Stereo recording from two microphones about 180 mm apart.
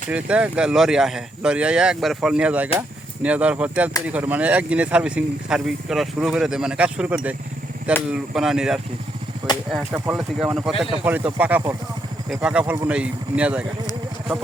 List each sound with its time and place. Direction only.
0.1 s speech: 5° right (ahead or behind)
9.4 s speech: 20° right (ahead or behind)
10.2 s speech: 5° right (ahead or behind)